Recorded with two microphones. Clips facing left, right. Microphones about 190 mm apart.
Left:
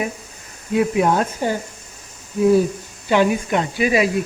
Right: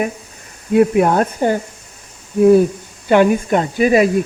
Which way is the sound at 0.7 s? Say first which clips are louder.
Right 5 dB; 50° right (ahead or behind).